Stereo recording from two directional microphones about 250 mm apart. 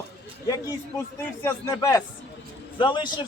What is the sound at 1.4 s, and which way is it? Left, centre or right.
A man's voice, centre.